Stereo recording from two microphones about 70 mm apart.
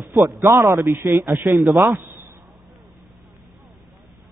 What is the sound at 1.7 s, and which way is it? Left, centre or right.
Speech, centre.